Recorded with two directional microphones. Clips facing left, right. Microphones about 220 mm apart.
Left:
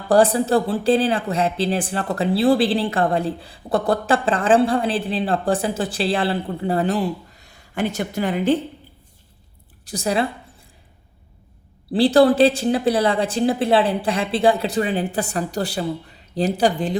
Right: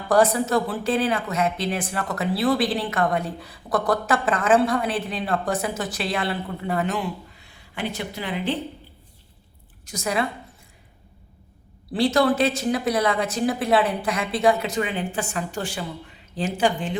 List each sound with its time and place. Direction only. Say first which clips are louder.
0.1 s speech: left 3 dB; 30° left (ahead or behind)
9.8 s a woman's voice: left 4 dB; 35° left (ahead or behind)
11.9 s speech: left 6 dB; 30° left (ahead or behind)